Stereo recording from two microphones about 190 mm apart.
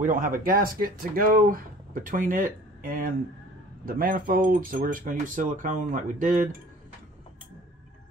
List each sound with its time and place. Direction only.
0.0 s speech: 45° right (ahead or behind)